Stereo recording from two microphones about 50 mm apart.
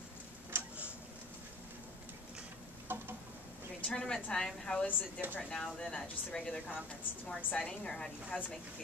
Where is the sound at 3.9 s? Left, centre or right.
Centre.